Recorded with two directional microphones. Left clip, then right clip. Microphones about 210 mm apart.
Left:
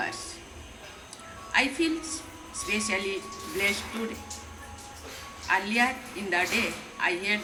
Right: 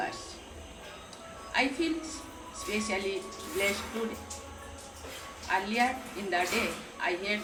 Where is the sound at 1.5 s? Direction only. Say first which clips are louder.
Left 4 dB; 40° left (ahead or behind).